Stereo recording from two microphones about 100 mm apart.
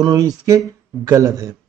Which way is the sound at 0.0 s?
40° right (ahead or behind).